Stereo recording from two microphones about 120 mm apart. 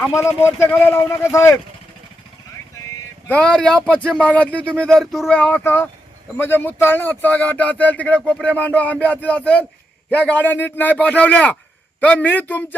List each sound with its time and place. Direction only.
0.1 s speech: 25° left (ahead or behind)
3.2 s speech: 10° left (ahead or behind)